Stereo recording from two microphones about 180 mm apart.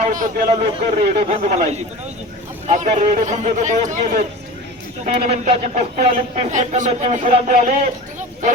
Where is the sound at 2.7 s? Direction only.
40° right (ahead or behind).